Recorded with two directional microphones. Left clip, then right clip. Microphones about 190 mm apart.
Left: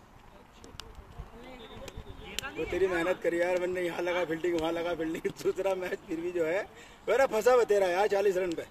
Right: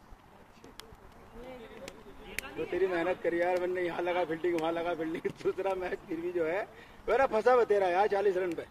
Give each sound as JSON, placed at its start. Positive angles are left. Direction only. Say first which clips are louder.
{"t": 2.7, "sound": "speech", "louder": "left 1 dB", "side_deg": 70}